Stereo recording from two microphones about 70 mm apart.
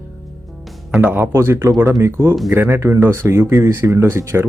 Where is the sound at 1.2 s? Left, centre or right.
Right.